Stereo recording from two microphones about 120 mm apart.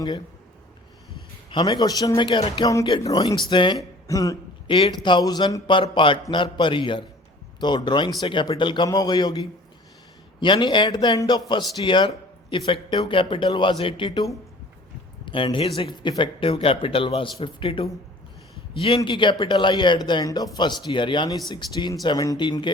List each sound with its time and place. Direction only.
1.5 s a man's voice: 40° left (ahead or behind)
2.6 s a man's voice: 30° left (ahead or behind)
3.5 s a man's voice: 40° left (ahead or behind)
4.0 s cough: 25° left (ahead or behind)
4.7 s a man's voice: 40° left (ahead or behind)
15.2 s a sound: 45° left (ahead or behind)
15.5 s a man's voice: 50° left (ahead or behind)